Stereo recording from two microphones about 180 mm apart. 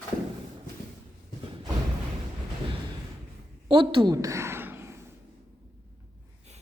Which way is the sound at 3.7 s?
25° right (ahead or behind).